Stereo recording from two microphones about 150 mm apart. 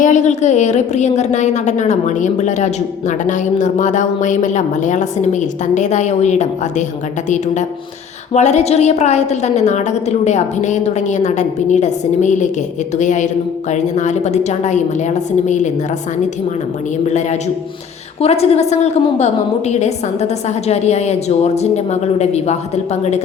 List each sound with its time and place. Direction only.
0.0 s a woman's voice: 55° left (ahead or behind)
8.3 s a woman's voice: 50° left (ahead or behind)
17.1 s a woman's voice: 50° left (ahead or behind)